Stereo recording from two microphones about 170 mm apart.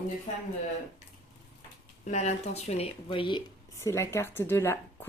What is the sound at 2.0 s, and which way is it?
Speech, 45° left (ahead or behind).